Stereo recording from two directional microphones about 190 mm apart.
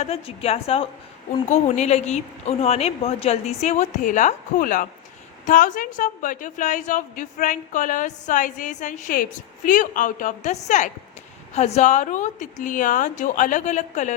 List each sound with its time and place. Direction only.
0.0 s a woman's voice: 35° left (ahead or behind)